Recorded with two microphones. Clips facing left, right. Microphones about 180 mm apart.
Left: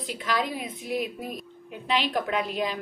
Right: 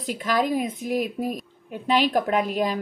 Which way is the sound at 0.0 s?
45° right (ahead or behind).